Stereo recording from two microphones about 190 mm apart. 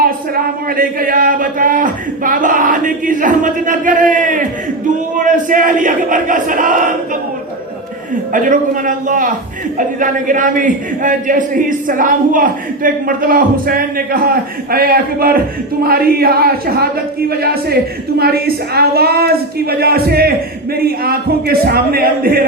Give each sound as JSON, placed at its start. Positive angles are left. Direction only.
{"t": 0.0, "sound": "a man's voice", "side_deg": -50}
{"t": 8.3, "sound": "a man's voice", "side_deg": -45}